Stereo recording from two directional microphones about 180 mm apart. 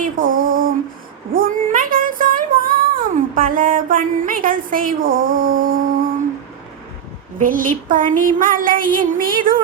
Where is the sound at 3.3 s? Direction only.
50° right (ahead or behind).